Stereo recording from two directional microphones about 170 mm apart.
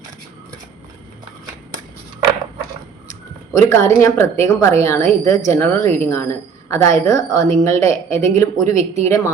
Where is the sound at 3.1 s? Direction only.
15° left (ahead or behind).